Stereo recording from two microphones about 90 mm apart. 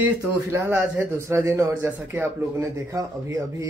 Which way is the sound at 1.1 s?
30° right (ahead or behind).